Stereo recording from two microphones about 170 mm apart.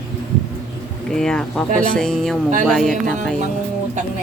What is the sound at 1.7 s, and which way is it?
Speech, 55° right (ahead or behind).